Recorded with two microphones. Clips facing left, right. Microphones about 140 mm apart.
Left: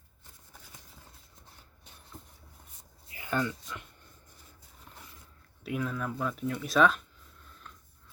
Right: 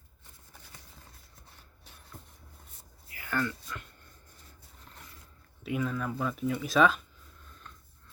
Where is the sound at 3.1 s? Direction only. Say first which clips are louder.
Left 1 dB; 20° left (ahead or behind).